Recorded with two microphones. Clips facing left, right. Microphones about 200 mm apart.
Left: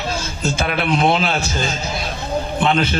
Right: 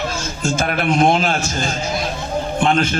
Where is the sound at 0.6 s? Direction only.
45° right (ahead or behind).